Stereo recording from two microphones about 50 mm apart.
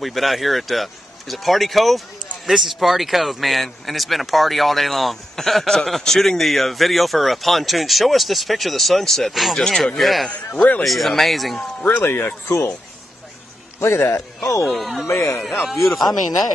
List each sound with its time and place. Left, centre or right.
0.0 s a man's voice: centre
9.6 s speech: centre
9.9 s a man's voice: centre
12.0 s speech: left
12.4 s speech: left
13.7 s a man's voice: left
14.7 s a man's voice: centre
15.0 s speech: left
15.7 s a man's voice: centre